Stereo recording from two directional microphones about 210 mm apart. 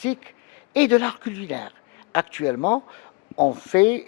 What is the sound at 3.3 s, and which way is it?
Speech, 25° left (ahead or behind).